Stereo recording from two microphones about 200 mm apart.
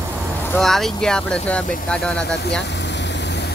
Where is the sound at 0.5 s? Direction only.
Centre (ahead or behind).